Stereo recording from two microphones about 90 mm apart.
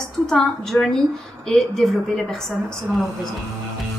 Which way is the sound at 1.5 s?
5° left (ahead or behind).